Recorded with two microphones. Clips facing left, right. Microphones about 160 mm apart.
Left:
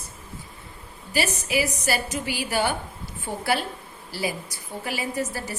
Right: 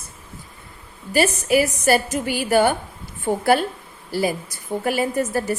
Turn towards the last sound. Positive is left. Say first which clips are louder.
# right 7 dB
turn(degrees=-50)  # may be behind; listen again after turning